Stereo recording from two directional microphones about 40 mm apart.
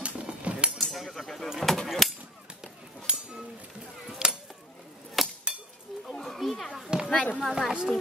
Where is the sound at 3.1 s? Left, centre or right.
Right.